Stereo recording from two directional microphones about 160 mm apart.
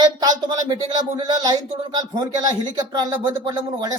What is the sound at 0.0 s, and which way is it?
Speech, 25° right (ahead or behind).